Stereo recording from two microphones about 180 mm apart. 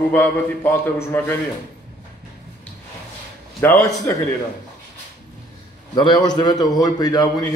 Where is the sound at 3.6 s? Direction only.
10° left (ahead or behind).